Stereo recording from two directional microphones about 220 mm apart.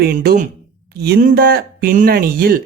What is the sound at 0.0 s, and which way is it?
A man's voice, 45° right (ahead or behind).